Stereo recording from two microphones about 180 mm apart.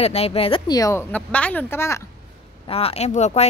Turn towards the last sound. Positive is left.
turn(degrees=40)  # may be behind; listen again after turning